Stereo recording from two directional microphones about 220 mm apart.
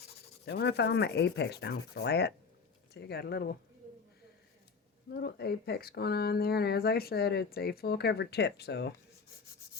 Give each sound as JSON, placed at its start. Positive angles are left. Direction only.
{"t": 0.4, "sound": "speech", "side_deg": 50}
{"t": 5.1, "sound": "speech", "side_deg": 45}